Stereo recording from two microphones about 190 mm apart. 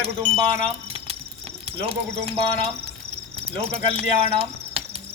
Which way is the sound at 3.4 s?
30° right (ahead or behind).